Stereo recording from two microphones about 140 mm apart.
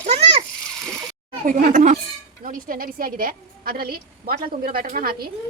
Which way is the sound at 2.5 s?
90° right.